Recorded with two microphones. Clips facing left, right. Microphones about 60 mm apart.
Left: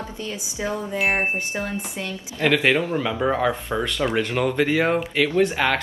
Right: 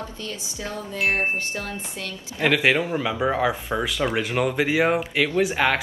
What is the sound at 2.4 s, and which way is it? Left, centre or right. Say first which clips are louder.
Speech: left 1 dB; centre.